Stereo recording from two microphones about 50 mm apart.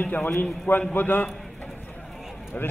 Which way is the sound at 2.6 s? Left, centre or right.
Left.